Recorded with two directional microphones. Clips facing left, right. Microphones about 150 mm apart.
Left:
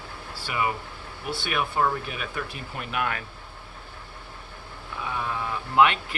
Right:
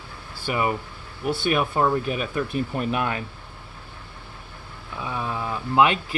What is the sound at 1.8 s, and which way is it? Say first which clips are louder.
Speech: right 4 dB; 30° right (ahead or behind).